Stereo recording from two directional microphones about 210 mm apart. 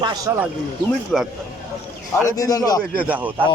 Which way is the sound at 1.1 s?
Centre (ahead or behind).